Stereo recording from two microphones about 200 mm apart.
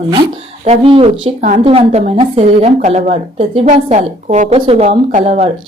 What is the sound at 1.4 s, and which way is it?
Speech, 40° right (ahead or behind).